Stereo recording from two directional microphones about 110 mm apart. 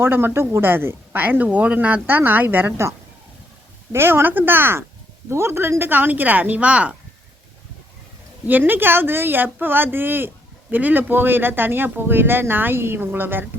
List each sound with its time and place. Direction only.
0.0 s speech: 20° right (ahead or behind)
3.9 s speech: 20° right (ahead or behind)
8.4 s speech: 15° right (ahead or behind)